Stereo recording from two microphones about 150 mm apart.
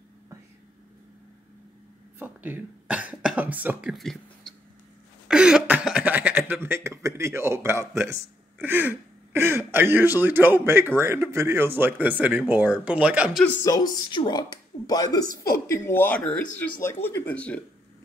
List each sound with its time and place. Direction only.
2.1 s speech: 10° right (ahead or behind)
13.7 s a woman's voice: 20° left (ahead or behind)